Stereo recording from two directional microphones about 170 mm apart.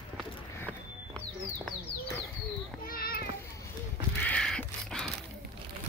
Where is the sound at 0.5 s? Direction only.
10° left (ahead or behind).